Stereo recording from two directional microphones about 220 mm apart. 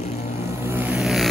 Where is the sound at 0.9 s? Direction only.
Centre (ahead or behind).